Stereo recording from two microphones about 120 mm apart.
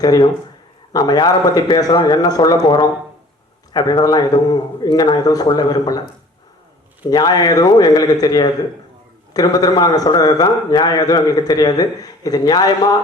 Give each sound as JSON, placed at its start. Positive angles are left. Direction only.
{"t": 0.0, "sound": "a man's voice", "side_deg": 35}
{"t": 7.1, "sound": "a man's voice", "side_deg": 35}